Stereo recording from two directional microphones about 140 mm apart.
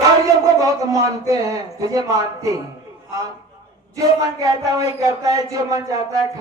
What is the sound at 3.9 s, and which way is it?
Music, 25° right (ahead or behind).